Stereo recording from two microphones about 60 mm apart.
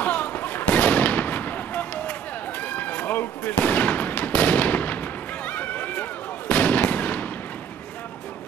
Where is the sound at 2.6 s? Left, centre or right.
Left.